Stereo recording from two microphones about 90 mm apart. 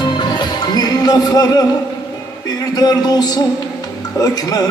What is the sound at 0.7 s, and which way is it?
Music, 50° left (ahead or behind).